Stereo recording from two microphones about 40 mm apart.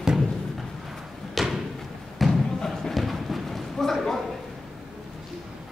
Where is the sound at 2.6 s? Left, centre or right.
Centre.